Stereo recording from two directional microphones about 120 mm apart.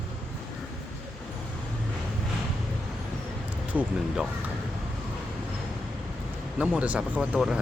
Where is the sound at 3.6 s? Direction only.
10° right (ahead or behind).